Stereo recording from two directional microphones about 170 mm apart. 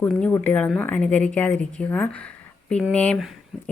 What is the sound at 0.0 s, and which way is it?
A woman's voice, 10° left (ahead or behind).